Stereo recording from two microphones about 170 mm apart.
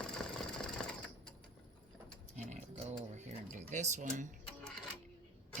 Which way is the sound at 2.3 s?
45° right (ahead or behind).